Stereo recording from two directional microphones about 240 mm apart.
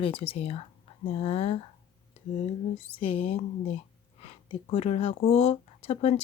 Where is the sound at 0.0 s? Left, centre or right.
Left.